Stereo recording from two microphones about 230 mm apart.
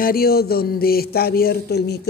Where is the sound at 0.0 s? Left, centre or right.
Left.